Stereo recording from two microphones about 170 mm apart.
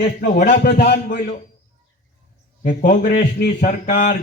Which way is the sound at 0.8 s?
75° left (ahead or behind).